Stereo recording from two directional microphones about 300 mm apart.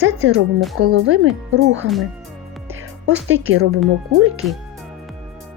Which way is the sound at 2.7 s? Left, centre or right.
Right.